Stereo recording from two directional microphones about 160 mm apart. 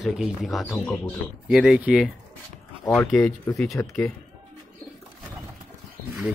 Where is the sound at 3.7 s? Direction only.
20° left (ahead or behind).